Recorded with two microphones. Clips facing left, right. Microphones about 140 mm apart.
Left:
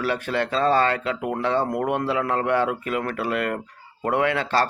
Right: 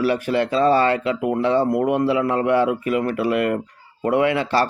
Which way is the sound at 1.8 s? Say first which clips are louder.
Right 5 dB; 55° left (ahead or behind).